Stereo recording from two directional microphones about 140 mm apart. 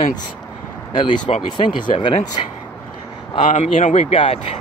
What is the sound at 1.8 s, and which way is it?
Speech, 35° left (ahead or behind).